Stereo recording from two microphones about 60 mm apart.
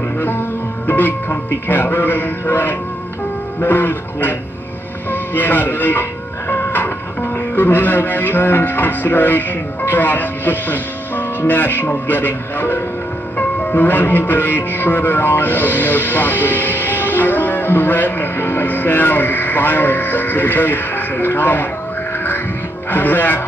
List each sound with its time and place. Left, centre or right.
0.2 s music: left
5.1 s speech: left
13.4 s music: left
22.8 s music: left